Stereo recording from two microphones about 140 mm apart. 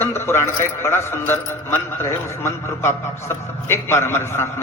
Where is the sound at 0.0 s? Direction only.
15° left (ahead or behind).